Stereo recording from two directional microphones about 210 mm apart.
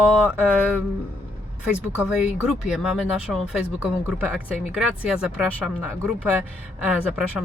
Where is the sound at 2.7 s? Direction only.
5° right (ahead or behind).